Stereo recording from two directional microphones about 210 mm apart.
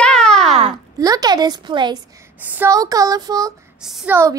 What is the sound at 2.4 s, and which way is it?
A woman's voice, 10° right (ahead or behind).